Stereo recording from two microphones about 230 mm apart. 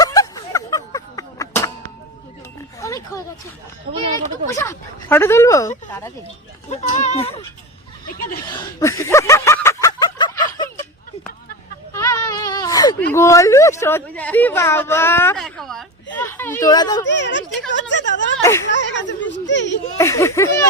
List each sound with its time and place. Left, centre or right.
0.0 s fowl: centre
2.8 s oink: centre
4.5 s speech: centre
6.7 s speech: left
8.4 s a sound: centre
13.1 s speech: centre
17.1 s speech: left
18.7 s a sound: left
20.0 s speech: centre